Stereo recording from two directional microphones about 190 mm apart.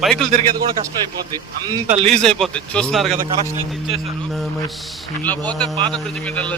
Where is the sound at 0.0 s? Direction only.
5° left (ahead or behind).